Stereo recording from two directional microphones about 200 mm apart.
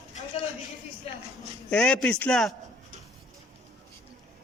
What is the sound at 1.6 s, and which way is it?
Speech, 5° left (ahead or behind).